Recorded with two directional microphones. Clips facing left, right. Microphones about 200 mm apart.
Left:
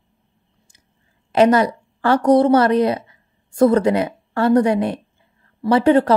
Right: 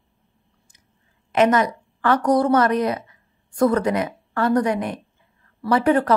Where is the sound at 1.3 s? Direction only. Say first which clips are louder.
Left 4 dB; 30° left (ahead or behind).